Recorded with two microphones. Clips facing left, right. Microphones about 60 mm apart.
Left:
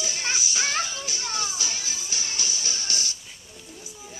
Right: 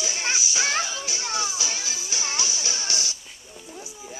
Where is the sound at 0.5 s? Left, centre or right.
Centre.